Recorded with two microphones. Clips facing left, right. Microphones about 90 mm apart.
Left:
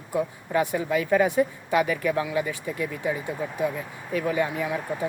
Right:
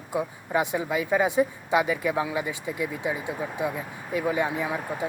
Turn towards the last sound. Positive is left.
turn(degrees=-20)  # may be behind; listen again after turning